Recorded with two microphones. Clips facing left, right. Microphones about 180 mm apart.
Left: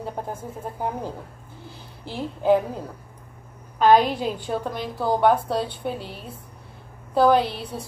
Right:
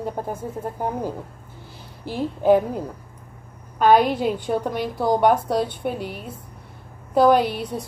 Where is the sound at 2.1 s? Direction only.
15° right (ahead or behind).